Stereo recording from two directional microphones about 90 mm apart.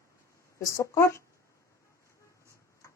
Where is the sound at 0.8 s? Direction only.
30° left (ahead or behind).